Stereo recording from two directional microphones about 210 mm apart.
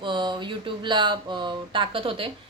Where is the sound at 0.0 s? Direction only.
20° right (ahead or behind).